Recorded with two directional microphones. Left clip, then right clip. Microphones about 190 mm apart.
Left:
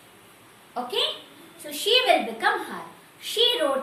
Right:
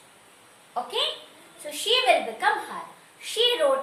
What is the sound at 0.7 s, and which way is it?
A woman's voice, 15° right (ahead or behind).